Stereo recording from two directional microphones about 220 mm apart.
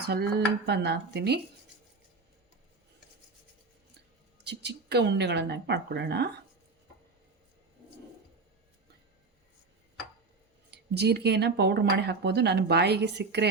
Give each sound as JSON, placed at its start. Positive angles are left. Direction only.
{"t": 0.0, "sound": "speech", "side_deg": -45}
{"t": 4.4, "sound": "speech", "side_deg": -50}
{"t": 10.7, "sound": "speech", "side_deg": -50}